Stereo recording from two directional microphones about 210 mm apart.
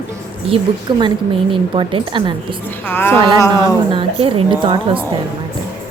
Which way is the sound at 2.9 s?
10° left (ahead or behind).